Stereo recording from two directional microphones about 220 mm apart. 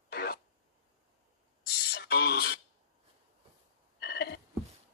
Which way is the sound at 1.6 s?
45° left (ahead or behind).